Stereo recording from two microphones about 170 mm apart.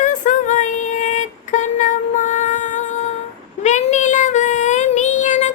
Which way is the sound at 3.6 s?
45° left (ahead or behind).